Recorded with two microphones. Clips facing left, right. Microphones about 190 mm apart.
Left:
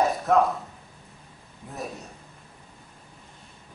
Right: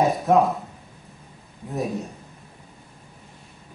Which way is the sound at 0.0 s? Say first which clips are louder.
Right 3 dB; centre (ahead or behind).